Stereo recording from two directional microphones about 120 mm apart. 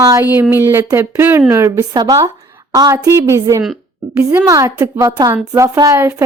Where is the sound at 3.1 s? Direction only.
25° right (ahead or behind).